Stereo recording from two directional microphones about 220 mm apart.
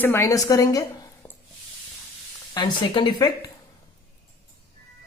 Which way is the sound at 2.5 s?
20° left (ahead or behind).